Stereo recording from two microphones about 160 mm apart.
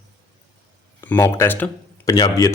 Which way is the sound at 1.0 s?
15° left (ahead or behind).